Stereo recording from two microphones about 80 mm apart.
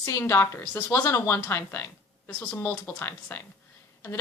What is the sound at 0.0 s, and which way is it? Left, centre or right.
A woman's voice, left.